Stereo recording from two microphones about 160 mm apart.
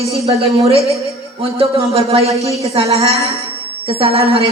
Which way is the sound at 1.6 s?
35° right (ahead or behind).